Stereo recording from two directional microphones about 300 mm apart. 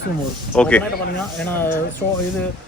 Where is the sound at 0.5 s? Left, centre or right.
Centre.